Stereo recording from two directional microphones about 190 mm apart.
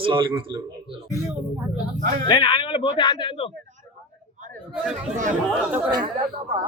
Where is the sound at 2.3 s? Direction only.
25° left (ahead or behind).